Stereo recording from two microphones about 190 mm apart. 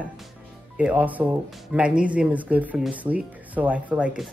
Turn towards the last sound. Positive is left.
turn(degrees=-5)  # may be behind; listen again after turning